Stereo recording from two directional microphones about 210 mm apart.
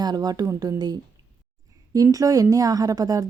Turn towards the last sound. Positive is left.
turn(degrees=-15)  # may be behind; listen again after turning